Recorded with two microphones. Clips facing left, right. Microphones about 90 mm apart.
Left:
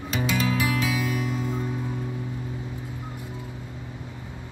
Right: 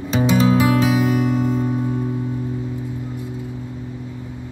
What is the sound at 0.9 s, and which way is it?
Music, 50° right (ahead or behind).